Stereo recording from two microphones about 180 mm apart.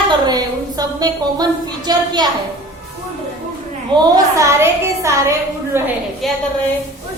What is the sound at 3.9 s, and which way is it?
A woman's voice, 20° right (ahead or behind).